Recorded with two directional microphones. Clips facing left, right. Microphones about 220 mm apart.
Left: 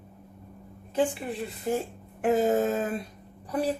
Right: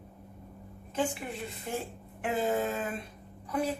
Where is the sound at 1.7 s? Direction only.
40° left (ahead or behind).